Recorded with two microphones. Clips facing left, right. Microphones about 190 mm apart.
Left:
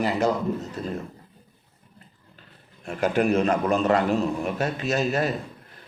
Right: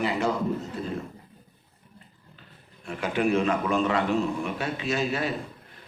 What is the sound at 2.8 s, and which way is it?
A man's voice, 45° left (ahead or behind).